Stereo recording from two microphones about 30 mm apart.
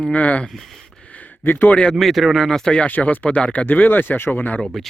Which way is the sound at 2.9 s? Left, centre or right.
Left.